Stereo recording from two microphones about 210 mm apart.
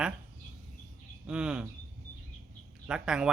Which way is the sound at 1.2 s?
5° right (ahead or behind).